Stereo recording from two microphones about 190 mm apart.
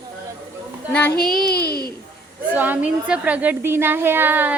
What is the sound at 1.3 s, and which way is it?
Speech, 55° left (ahead or behind).